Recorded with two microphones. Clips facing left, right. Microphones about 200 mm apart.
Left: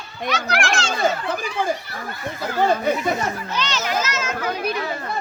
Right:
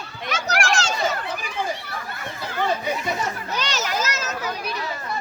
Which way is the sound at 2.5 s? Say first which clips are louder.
Left 5 dB; 50° left (ahead or behind).